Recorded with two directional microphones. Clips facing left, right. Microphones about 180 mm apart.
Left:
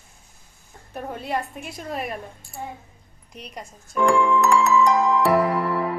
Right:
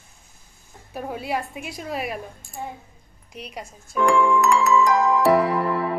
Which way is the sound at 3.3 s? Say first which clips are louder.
Right 2 dB; 5° right (ahead or behind).